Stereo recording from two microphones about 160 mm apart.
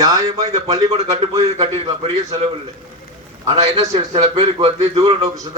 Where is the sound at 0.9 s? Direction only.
40° right (ahead or behind).